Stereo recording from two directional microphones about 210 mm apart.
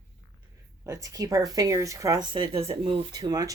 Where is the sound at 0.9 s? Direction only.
15° right (ahead or behind).